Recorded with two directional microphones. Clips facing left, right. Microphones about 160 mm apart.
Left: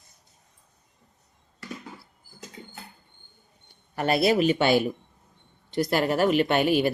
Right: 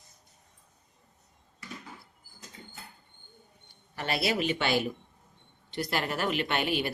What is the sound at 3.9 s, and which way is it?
Speech, 45° left (ahead or behind).